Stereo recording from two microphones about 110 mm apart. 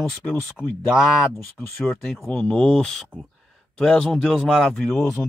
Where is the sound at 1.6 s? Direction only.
20° left (ahead or behind).